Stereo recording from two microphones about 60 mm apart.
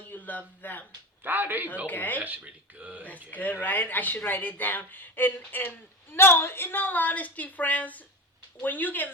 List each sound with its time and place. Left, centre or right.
0.1 s speech: left
1.2 s speech: right
1.9 s speech: left
2.1 s speech: right
3.2 s a woman's voice: left